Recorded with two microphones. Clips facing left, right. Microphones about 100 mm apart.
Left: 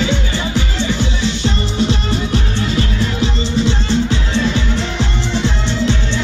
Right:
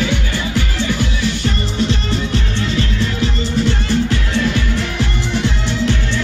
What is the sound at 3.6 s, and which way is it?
Music, 20° left (ahead or behind).